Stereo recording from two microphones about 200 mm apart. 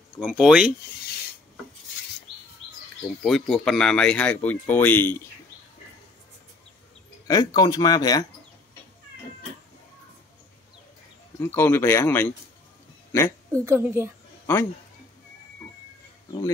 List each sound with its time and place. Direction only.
0.2 s speech: 5° right (ahead or behind)
3.2 s speech: centre (ahead or behind)
7.2 s speech: 20° left (ahead or behind)
11.3 s speech: 10° left (ahead or behind)
13.1 s a sound: 10° left (ahead or behind)
13.7 s a woman's voice: 10° right (ahead or behind)
14.4 s a sound: 10° left (ahead or behind)